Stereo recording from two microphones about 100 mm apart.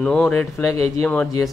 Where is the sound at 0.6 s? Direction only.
35° left (ahead or behind).